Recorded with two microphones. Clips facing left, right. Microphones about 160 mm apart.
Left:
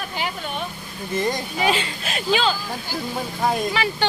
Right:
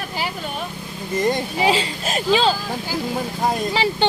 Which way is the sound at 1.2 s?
25° right (ahead or behind).